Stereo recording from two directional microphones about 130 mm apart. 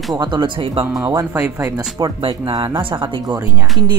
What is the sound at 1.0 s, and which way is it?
Speech, 25° right (ahead or behind).